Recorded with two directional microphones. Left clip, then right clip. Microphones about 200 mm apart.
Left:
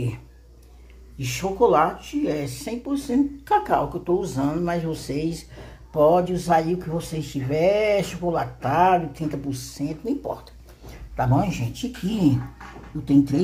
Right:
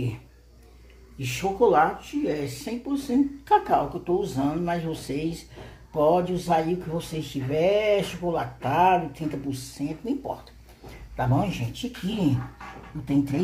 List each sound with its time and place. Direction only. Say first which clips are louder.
1.1 s speech: left 1 dB; centre (ahead or behind)